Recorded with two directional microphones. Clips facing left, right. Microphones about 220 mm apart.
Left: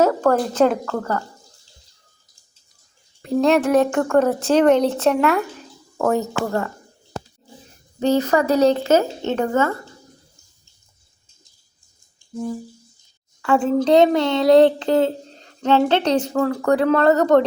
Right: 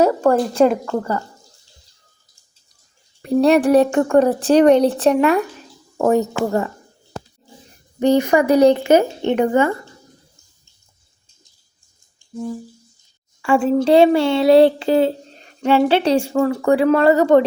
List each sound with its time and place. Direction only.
0.0 s speech: 10° right (ahead or behind)
3.2 s speech: 15° right (ahead or behind)
7.9 s speech: 15° right (ahead or behind)
13.4 s a woman's voice: 10° right (ahead or behind)